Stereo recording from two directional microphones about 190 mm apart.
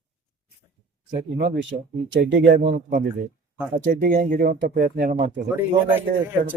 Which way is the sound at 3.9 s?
50° right (ahead or behind).